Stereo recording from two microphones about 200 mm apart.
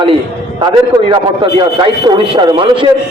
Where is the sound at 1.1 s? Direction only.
25° right (ahead or behind).